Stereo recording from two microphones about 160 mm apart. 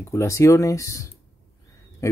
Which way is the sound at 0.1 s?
20° left (ahead or behind).